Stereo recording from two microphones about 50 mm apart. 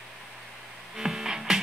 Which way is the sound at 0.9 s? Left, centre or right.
Centre.